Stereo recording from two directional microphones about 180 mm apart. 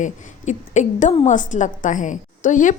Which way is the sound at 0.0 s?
40° left (ahead or behind).